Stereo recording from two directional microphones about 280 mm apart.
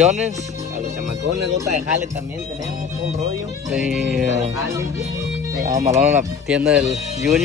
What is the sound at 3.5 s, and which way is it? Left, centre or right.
Speech, centre.